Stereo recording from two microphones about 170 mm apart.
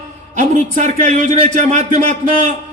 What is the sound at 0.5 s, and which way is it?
A man's voice, 45° right (ahead or behind).